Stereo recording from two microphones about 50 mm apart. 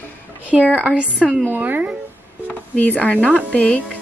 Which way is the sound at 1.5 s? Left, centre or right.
Right.